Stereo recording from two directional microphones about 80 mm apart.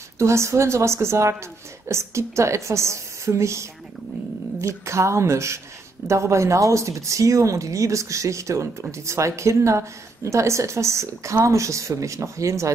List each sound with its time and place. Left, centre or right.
0.2 s a woman's voice: right
4.8 s a woman's voice: right